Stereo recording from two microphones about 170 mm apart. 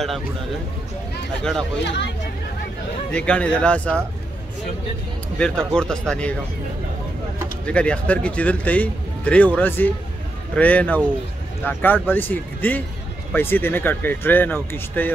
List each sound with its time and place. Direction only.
1.4 s speech: 5° left (ahead or behind)
3.1 s speech: 5° left (ahead or behind)
5.4 s speech: 5° left (ahead or behind)
7.6 s speech: 5° left (ahead or behind)